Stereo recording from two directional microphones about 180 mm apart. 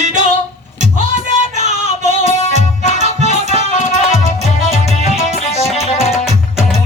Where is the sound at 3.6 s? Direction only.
40° left (ahead or behind).